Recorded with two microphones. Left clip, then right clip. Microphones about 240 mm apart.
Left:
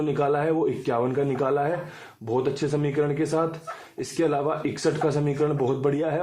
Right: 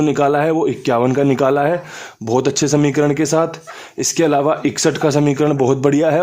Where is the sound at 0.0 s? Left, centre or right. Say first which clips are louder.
Right 9 dB; right.